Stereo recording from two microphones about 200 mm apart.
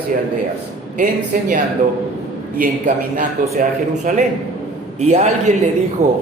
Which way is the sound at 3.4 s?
45° right (ahead or behind).